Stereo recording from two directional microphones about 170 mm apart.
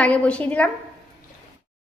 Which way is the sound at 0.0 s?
5° left (ahead or behind).